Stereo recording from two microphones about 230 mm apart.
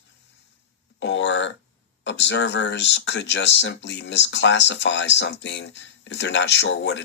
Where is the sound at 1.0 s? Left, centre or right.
Left.